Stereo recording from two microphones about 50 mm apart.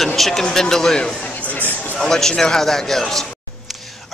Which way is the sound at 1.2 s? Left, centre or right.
Left.